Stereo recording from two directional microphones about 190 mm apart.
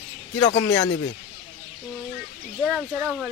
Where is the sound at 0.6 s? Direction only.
20° left (ahead or behind).